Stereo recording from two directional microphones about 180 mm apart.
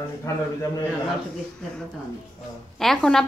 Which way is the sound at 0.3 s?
15° left (ahead or behind).